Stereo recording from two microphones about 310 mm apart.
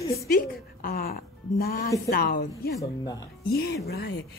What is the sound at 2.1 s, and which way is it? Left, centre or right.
Speech, left.